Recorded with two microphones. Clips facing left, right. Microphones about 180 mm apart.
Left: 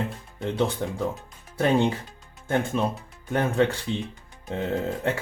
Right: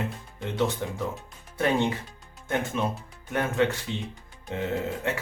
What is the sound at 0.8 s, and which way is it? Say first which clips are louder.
Speech: left 3 dB; 35° left (ahead or behind).